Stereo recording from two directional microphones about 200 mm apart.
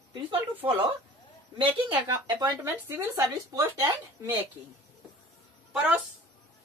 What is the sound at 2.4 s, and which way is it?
Speech, 20° right (ahead or behind).